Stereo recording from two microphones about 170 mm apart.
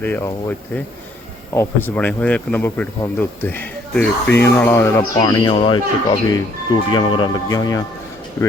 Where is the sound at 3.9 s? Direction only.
10° left (ahead or behind).